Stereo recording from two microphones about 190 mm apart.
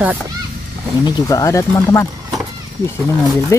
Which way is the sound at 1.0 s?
20° left (ahead or behind).